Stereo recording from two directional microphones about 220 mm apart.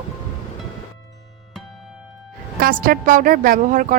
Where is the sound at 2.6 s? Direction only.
40° right (ahead or behind).